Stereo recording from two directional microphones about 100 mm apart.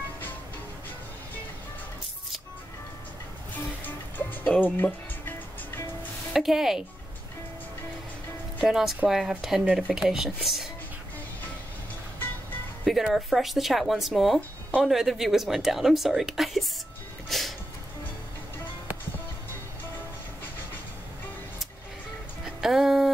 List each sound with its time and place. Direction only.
4.5 s speech: 15° left (ahead or behind)
6.3 s speech: 5° right (ahead or behind)
8.6 s speech: 5° right (ahead or behind)
12.8 s speech: centre (ahead or behind)
17.3 s music: centre (ahead or behind)
22.4 s music: 5° right (ahead or behind)